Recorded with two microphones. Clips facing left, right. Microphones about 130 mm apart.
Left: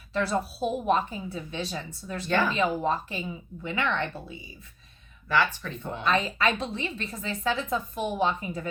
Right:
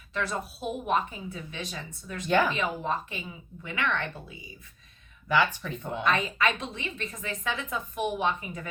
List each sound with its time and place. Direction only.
0.1 s a woman's voice: 35° left (ahead or behind)
2.2 s speech: 15° right (ahead or behind)
2.6 s a woman's voice: 35° left (ahead or behind)
5.3 s speech: 15° right (ahead or behind)
6.1 s a woman's voice: 30° left (ahead or behind)